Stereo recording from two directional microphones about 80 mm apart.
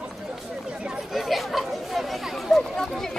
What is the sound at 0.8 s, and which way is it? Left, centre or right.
Chatter, centre.